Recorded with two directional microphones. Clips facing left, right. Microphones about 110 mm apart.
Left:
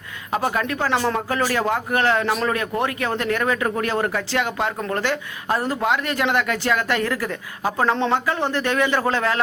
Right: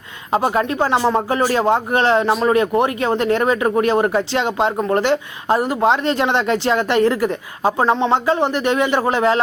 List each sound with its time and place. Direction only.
0.3 s speech: 25° right (ahead or behind)